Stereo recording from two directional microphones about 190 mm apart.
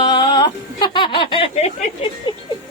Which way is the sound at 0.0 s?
25° left (ahead or behind).